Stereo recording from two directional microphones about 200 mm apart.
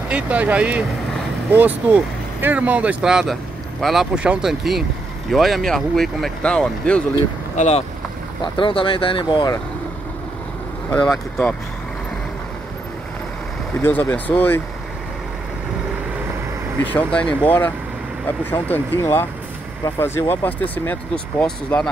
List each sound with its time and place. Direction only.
0.1 s speech: 5° right (ahead or behind)
7.5 s speech: 35° left (ahead or behind)
8.4 s speech: 25° left (ahead or behind)
11.1 s speech: centre (ahead or behind)
13.8 s speech: 10° left (ahead or behind)
16.8 s speech: 5° left (ahead or behind)